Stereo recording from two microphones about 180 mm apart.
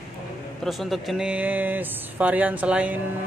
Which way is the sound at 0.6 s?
Centre (ahead or behind).